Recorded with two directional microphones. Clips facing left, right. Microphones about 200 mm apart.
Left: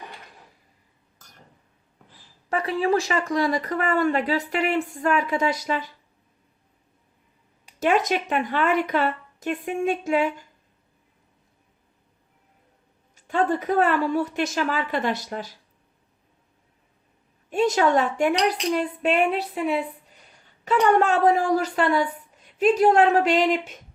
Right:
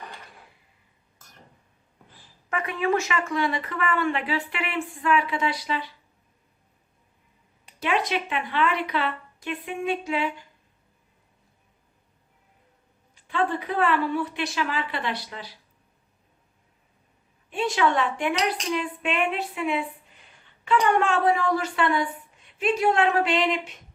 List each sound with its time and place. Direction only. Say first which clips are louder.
2.5 s speech: left 3 dB; 35° left (ahead or behind)
7.8 s a woman's voice: left 4 dB; 45° left (ahead or behind)
13.1 s a woman's voice: left 3 dB; 45° left (ahead or behind)
17.5 s a woman's voice: left 4 dB; 40° left (ahead or behind)
18.4 s a sound: left 4 dB; 40° left (ahead or behind)
21.0 s speech: left 3 dB; 40° left (ahead or behind)